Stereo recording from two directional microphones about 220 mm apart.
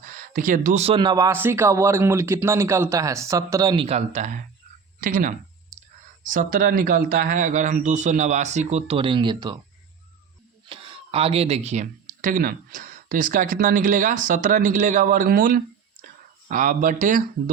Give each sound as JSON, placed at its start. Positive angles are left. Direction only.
{"t": 0.0, "sound": "speech", "side_deg": -40}
{"t": 10.7, "sound": "speech", "side_deg": -25}